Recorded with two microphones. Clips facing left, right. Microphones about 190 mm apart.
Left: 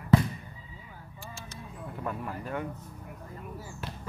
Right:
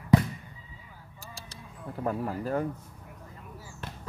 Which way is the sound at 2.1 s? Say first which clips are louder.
Right 6 dB; 35° right (ahead or behind).